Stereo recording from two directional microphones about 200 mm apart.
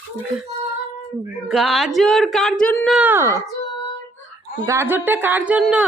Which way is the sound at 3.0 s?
10° right (ahead or behind).